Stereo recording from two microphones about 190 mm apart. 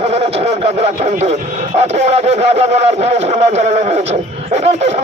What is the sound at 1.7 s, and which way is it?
Speech, 35° right (ahead or behind).